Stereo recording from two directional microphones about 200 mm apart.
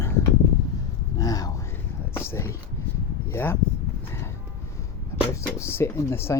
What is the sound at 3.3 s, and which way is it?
Speech, 10° left (ahead or behind).